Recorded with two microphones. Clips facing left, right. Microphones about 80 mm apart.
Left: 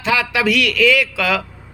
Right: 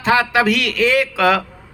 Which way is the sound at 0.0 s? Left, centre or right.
Right.